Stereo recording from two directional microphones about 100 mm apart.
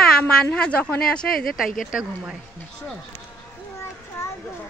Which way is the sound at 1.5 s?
5° right (ahead or behind).